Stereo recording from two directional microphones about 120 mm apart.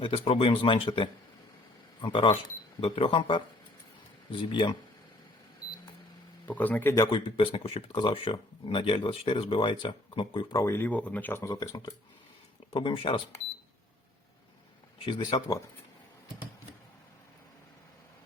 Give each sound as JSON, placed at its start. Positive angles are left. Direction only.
{"t": 0.0, "sound": "speech", "side_deg": 55}
{"t": 6.4, "sound": "speech", "side_deg": 15}
{"t": 7.1, "sound": "speech", "side_deg": 50}
{"t": 10.5, "sound": "speech", "side_deg": 25}
{"t": 11.4, "sound": "speech", "side_deg": 30}
{"t": 12.7, "sound": "speech", "side_deg": 45}
{"t": 15.0, "sound": "speech", "side_deg": 40}